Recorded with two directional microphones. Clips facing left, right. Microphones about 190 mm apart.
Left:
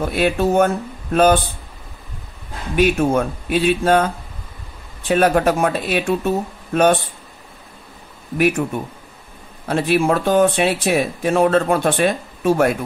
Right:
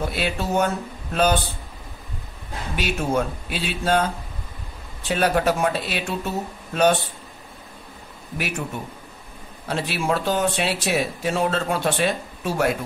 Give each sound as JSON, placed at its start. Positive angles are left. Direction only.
{"t": 0.1, "sound": "speech", "side_deg": 50}
{"t": 2.7, "sound": "speech", "side_deg": 55}
{"t": 8.4, "sound": "speech", "side_deg": 55}
{"t": 9.7, "sound": "speech", "side_deg": 55}